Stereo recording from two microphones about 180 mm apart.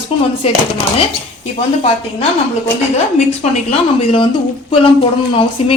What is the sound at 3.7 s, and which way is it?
Speech, 30° left (ahead or behind).